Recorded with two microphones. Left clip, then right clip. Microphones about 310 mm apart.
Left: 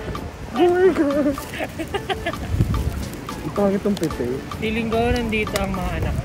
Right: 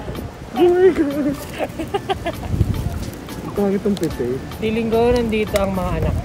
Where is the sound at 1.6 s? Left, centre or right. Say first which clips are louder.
Right 3 dB; centre.